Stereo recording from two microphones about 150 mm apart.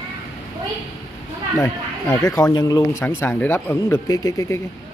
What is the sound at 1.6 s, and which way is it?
Speech, 20° left (ahead or behind).